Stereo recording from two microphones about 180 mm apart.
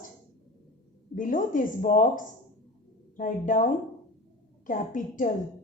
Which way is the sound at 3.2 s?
50° left (ahead or behind).